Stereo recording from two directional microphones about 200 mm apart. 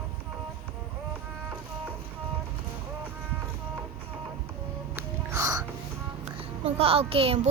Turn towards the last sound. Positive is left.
turn(degrees=-30)  # may be behind; listen again after turning